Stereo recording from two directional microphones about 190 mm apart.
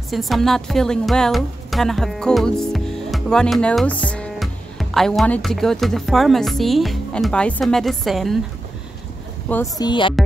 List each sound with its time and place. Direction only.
0.1 s a woman's voice: centre (ahead or behind)
9.5 s speech: 15° left (ahead or behind)